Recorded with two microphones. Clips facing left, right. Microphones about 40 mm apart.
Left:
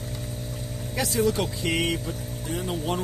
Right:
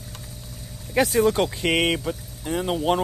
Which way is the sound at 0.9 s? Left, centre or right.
Right.